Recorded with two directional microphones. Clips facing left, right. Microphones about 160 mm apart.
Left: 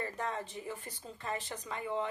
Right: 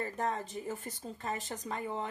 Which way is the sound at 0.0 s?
45° right (ahead or behind).